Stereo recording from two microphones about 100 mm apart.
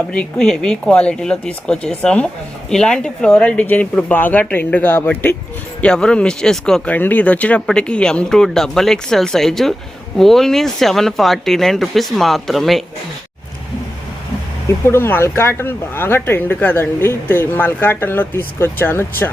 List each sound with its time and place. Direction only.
0.1 s speech: 10° left (ahead or behind)
5.8 s speech: 10° left (ahead or behind)
6.9 s speech: 15° left (ahead or behind)
14.8 s speech: 25° left (ahead or behind)